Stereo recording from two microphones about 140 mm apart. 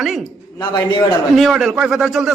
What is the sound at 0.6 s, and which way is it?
Speech, 35° left (ahead or behind).